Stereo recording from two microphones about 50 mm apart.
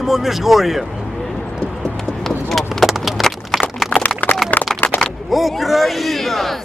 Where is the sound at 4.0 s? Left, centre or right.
Left.